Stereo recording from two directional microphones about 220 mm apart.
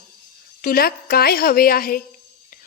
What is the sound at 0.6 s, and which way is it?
A woman's voice, 45° left (ahead or behind).